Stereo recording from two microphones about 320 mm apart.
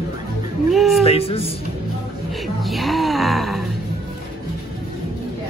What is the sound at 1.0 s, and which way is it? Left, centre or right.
Speech, centre.